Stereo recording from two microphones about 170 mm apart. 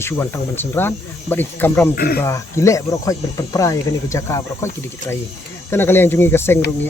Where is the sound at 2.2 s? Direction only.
15° left (ahead or behind).